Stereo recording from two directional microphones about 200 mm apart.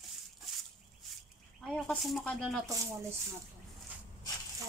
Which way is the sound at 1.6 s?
5° left (ahead or behind).